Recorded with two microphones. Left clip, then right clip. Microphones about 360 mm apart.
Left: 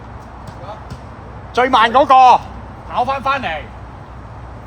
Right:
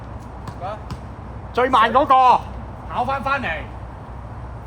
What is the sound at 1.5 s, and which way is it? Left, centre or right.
Speech, left.